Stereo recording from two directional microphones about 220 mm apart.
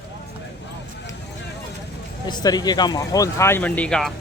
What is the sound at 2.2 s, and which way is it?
Speech, 20° left (ahead or behind).